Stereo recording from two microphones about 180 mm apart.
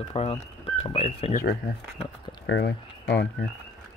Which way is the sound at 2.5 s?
70° left (ahead or behind).